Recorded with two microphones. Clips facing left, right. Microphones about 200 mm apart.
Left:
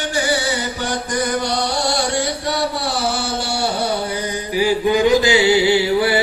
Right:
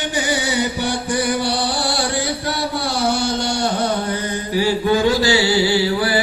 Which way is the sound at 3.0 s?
5° left (ahead or behind).